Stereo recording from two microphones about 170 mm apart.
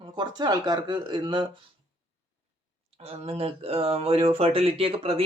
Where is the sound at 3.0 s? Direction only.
35° right (ahead or behind).